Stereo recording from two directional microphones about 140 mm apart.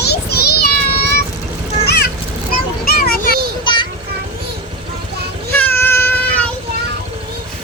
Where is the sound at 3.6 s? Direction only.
35° left (ahead or behind).